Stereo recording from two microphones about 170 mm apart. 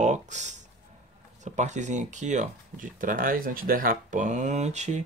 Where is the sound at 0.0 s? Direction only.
45° right (ahead or behind).